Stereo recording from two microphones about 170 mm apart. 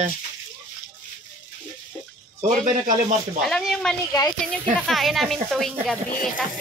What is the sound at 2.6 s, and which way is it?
Speech, 50° right (ahead or behind).